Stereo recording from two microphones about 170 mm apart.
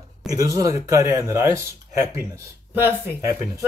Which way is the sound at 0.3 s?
20° right (ahead or behind).